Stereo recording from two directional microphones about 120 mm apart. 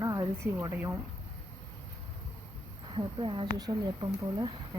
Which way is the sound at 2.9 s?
45° right (ahead or behind).